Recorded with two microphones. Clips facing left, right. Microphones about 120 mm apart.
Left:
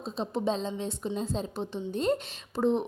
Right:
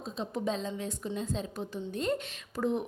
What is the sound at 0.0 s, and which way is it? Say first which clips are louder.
A woman's voice: left 3 dB; 30° left (ahead or behind).